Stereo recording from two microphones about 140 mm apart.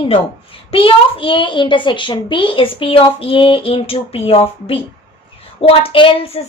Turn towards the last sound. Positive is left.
turn(degrees=40)  # may be behind; listen again after turning